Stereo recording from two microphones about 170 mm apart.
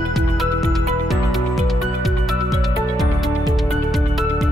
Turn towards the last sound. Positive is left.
turn(degrees=0)  # may be behind; listen again after turning